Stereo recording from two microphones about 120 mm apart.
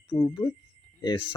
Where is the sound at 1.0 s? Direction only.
40° left (ahead or behind).